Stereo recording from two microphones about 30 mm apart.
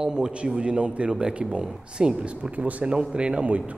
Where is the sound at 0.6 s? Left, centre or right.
Right.